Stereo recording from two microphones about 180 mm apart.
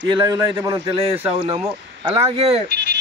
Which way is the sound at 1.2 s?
30° right (ahead or behind).